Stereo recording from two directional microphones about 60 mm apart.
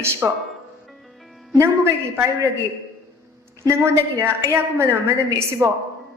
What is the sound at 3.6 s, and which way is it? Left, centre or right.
A woman's voice, right.